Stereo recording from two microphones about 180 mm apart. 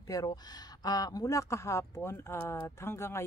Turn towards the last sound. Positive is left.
turn(degrees=15)  # may be behind; listen again after turning